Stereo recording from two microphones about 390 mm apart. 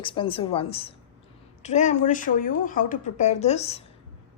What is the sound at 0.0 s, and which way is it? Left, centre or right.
A woman's voice, centre.